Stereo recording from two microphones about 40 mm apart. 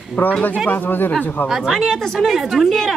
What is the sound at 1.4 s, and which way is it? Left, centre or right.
Speech, centre.